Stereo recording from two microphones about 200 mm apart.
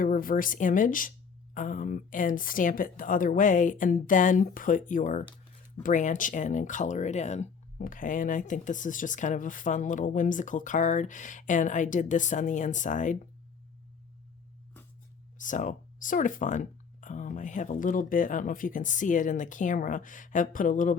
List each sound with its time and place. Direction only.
0.0 s speech: 45° left (ahead or behind)
15.4 s speech: 40° left (ahead or behind)